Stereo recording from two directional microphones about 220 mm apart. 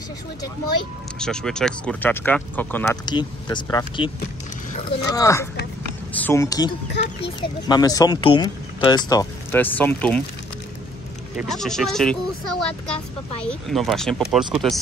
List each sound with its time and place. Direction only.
1.2 s speech: 5° left (ahead or behind)
3.1 s speech: 20° left (ahead or behind)
5.1 s speech: 15° left (ahead or behind)
11.3 s speech: centre (ahead or behind)